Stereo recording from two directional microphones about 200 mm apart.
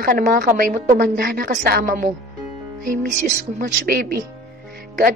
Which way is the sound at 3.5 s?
45° right (ahead or behind).